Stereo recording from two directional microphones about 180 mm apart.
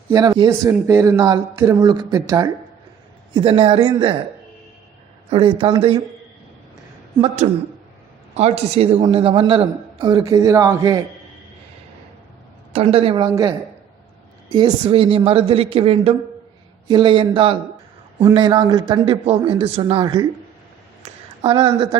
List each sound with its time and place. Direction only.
0.1 s a man's voice: 20° right (ahead or behind)
3.3 s a man's voice: 30° right (ahead or behind)
5.3 s a man's voice: 30° right (ahead or behind)
7.4 s a man's voice: 35° right (ahead or behind); by 11.0 s 20° right (ahead or behind)
12.7 s a man's voice: 35° right (ahead or behind)
14.5 s a man's voice: 30° right (ahead or behind)
21.0 s a sound: 30° right (ahead or behind)